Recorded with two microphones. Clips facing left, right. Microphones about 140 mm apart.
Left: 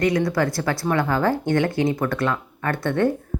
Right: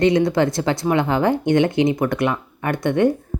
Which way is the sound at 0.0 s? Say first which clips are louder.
Right 4 dB; 25° right (ahead or behind).